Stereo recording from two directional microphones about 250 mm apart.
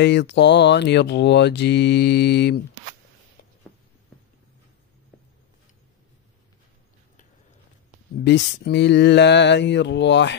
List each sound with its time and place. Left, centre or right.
0.0 s mantra: left
8.2 s mantra: left